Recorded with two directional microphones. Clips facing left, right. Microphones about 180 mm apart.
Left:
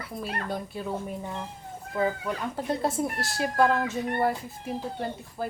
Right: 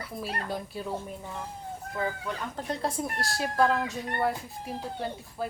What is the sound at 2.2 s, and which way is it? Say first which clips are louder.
Speech: left 4 dB; 5° left (ahead or behind).